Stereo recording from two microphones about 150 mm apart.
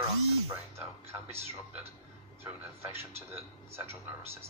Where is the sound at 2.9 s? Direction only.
15° right (ahead or behind).